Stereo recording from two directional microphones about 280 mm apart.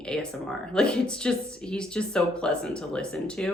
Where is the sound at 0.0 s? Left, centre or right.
Centre.